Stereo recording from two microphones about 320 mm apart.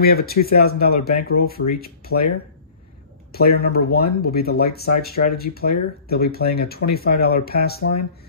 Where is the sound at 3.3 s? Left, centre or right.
Left.